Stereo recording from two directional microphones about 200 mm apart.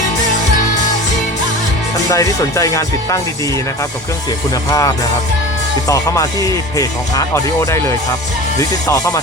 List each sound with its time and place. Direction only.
2.0 s speech: 15° left (ahead or behind)
5.9 s speech: 15° left (ahead or behind)